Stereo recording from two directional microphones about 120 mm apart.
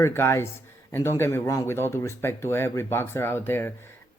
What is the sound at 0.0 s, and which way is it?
Speech, 20° left (ahead or behind).